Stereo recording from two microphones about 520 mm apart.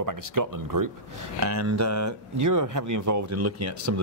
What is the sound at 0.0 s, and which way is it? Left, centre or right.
Speech, right.